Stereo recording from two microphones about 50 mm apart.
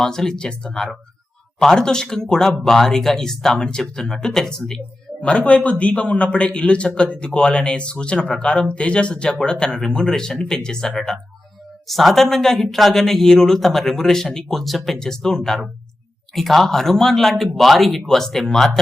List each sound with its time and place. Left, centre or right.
0.0 s speech: centre
5.2 s a man's voice: left